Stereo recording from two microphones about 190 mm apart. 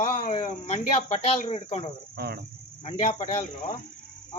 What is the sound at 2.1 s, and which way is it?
Cricket, 60° right (ahead or behind).